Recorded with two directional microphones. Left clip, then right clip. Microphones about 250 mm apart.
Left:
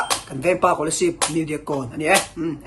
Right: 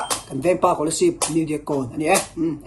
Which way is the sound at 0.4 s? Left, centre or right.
Centre.